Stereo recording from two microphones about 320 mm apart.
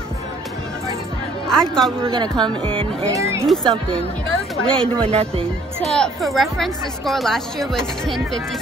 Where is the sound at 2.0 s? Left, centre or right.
Centre.